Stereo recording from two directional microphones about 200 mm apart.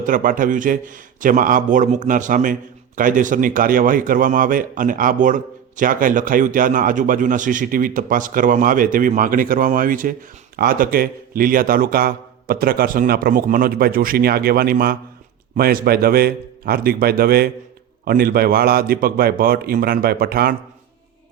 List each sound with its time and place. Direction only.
0.0 s a man's voice: 45° right (ahead or behind)